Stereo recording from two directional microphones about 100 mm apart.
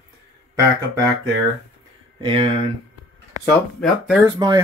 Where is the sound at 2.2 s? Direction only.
65° right (ahead or behind).